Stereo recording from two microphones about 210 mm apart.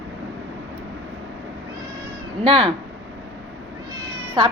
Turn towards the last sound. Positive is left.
turn(degrees=-25)  # may be behind; listen again after turning